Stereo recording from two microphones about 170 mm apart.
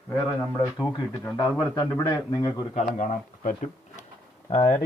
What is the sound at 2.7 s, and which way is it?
Speech, 45° left (ahead or behind).